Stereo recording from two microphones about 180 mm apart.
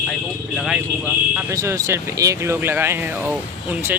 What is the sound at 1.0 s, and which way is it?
Speech, 10° right (ahead or behind).